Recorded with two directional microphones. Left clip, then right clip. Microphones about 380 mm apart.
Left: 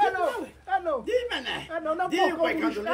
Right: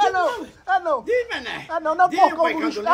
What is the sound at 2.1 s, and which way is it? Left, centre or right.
Speech, centre.